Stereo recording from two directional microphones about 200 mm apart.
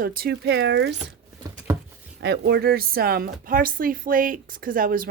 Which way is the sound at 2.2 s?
55° right (ahead or behind).